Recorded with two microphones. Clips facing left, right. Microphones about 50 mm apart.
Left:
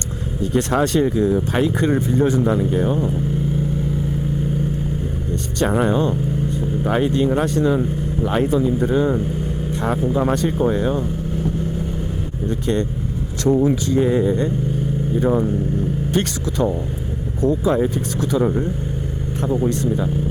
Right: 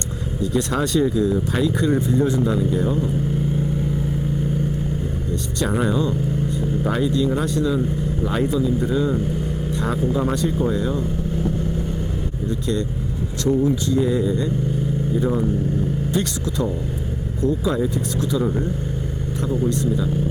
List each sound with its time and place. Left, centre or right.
0.5 s speech: left
5.6 s speech: left
5.9 s speech: left
8.2 s speech: left
8.4 s speech: left
9.7 s speech: left
10.3 s speech: left
12.5 s speech: left
13.5 s speech: left
16.1 s speech: left
17.7 s speech: left